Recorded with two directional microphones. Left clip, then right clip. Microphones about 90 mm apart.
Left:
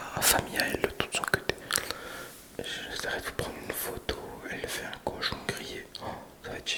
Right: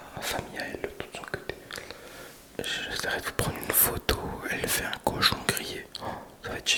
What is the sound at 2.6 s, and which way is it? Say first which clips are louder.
Whispering: right 4 dB; 20° right (ahead or behind).